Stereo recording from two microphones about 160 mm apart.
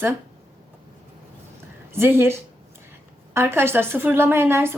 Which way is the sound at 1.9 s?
15° right (ahead or behind).